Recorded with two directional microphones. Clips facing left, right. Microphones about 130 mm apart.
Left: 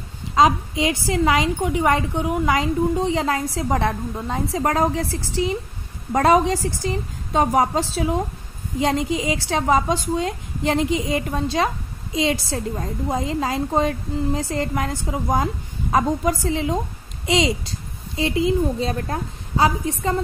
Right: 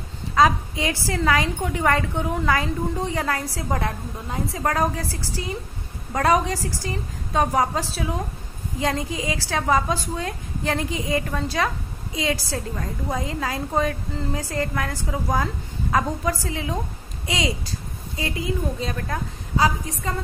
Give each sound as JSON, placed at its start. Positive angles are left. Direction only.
{"t": 0.3, "sound": "a woman's voice", "side_deg": 20}